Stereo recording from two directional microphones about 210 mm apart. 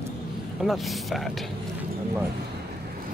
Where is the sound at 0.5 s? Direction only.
Centre (ahead or behind).